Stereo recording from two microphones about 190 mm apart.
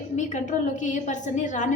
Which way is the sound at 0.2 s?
40° left (ahead or behind).